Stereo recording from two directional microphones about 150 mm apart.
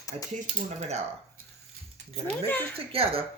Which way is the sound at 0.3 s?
50° right (ahead or behind).